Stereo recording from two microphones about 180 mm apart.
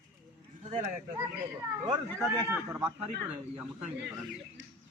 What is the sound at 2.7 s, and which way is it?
A man's voice, 10° right (ahead or behind).